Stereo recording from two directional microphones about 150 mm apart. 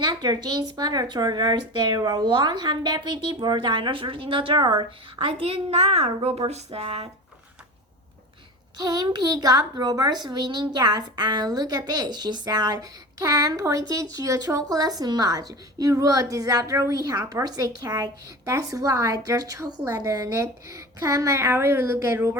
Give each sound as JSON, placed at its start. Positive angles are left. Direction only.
{"t": 0.0, "sound": "a woman's voice", "side_deg": -25}
{"t": 8.8, "sound": "a woman's voice", "side_deg": -25}